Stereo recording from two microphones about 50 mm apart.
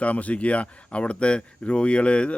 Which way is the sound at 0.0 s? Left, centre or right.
Left.